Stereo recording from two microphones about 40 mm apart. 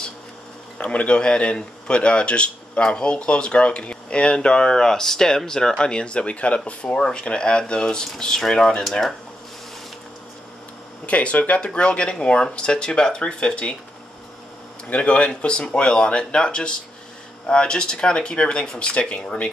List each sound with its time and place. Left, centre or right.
0.7 s a man's voice: left
7.0 s a man's voice: centre
11.1 s a man's voice: left
14.9 s a man's voice: left